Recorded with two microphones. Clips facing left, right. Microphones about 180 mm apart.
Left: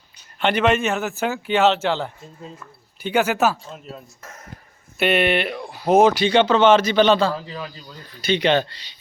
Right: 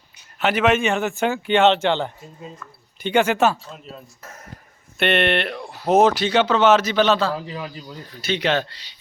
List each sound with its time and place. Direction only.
0.3 s speech: 5° right (ahead or behind)
7.3 s speech: 15° right (ahead or behind)
8.2 s speech: 5° right (ahead or behind)